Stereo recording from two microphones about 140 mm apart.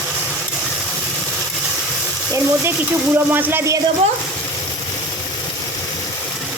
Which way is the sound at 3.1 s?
15° right (ahead or behind).